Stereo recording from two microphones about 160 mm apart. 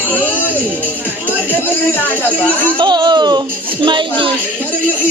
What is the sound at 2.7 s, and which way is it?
Speech, 25° right (ahead or behind).